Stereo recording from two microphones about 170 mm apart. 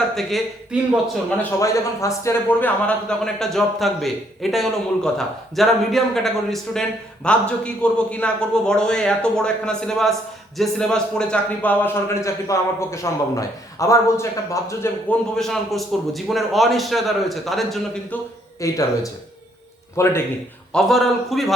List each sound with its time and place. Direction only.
0.2 s speech: centre (ahead or behind)
1.4 s a man's voice: 20° left (ahead or behind)
15.1 s speech: centre (ahead or behind)
18.6 s a man's voice: 20° left (ahead or behind)
20.7 s speech: centre (ahead or behind)